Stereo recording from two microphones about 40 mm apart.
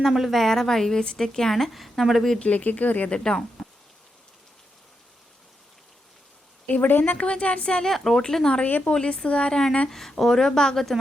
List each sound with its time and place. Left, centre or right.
0.2 s speech: centre
2.4 s speech: left
3.6 s a sound: centre
6.7 s a woman's voice: left
7.1 s speech: left
7.9 s speech: centre
8.6 s a woman's voice: left
9.0 s speech: left
9.9 s speech: centre